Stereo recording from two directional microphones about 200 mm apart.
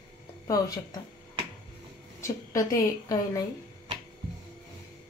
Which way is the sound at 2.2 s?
15° left (ahead or behind).